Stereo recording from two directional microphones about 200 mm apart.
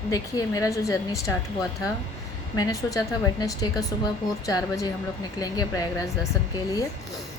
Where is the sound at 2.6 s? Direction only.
15° left (ahead or behind).